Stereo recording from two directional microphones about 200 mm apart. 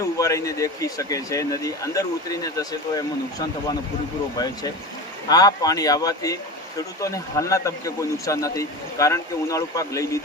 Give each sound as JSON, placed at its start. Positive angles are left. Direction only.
{"t": 0.0, "sound": "speech", "side_deg": 15}
{"t": 4.4, "sound": "speech", "side_deg": 20}